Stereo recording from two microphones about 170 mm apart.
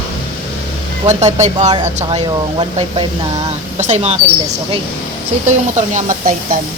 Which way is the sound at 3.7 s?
40° right (ahead or behind).